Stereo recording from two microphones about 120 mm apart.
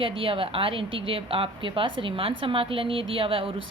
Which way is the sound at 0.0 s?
50° right (ahead or behind).